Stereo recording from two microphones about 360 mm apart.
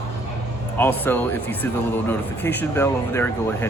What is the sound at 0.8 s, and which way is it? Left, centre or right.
Speech, centre.